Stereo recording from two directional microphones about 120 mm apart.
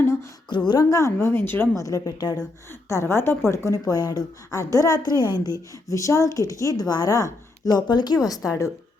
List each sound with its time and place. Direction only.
0.0 s a sound: 25° left (ahead or behind)
0.7 s speech: 30° left (ahead or behind)
1.8 s a woman's voice: 30° left (ahead or behind)
2.9 s a woman's voice: 20° left (ahead or behind)